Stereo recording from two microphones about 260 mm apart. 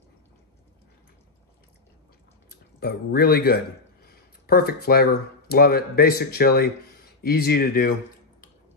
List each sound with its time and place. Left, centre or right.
2.5 s a man's voice: left